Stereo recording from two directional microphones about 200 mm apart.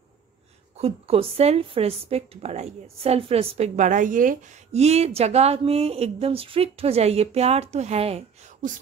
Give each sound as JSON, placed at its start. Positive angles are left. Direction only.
{"t": 0.7, "sound": "a woman's voice", "side_deg": -30}